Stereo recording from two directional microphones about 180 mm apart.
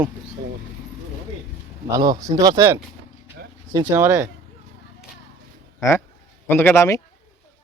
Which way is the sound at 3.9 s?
15° right (ahead or behind).